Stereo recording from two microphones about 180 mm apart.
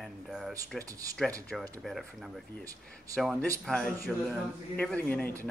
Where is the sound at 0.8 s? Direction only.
20° right (ahead or behind).